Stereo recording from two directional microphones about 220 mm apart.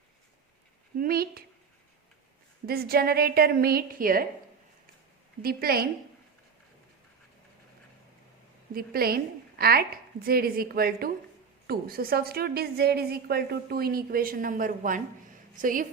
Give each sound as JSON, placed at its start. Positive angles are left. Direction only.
{"t": 0.9, "sound": "a woman's voice", "side_deg": -40}
{"t": 2.6, "sound": "a woman's voice", "side_deg": -45}
{"t": 5.4, "sound": "a woman's voice", "side_deg": -40}
{"t": 8.7, "sound": "a woman's voice", "side_deg": -45}